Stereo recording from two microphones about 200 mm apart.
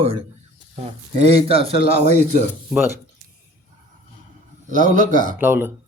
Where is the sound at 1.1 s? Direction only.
30° right (ahead or behind).